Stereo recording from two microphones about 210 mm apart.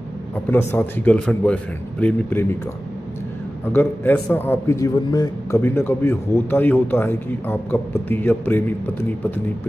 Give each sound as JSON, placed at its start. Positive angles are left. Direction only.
{"t": 0.5, "sound": "a man's voice", "side_deg": 10}
{"t": 3.7, "sound": "a man's voice", "side_deg": 10}